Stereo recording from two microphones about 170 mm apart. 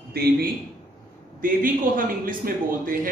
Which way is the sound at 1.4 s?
55° right (ahead or behind).